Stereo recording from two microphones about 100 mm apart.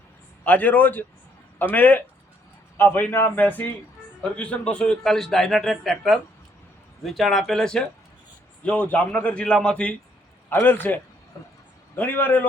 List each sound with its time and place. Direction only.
0.4 s a man's voice: 15° left (ahead or behind)